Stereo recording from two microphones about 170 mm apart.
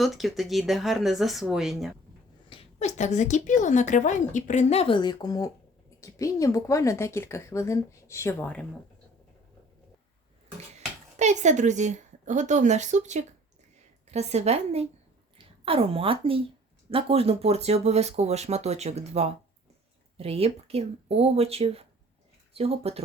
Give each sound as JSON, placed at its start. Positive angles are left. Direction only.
{"t": 0.0, "sound": "speech", "side_deg": 0}
{"t": 2.5, "sound": "a woman's voice", "side_deg": 35}
{"t": 10.8, "sound": "speech", "side_deg": -40}